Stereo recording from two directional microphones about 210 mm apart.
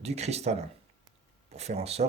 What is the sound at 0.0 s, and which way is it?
Speech, 30° right (ahead or behind).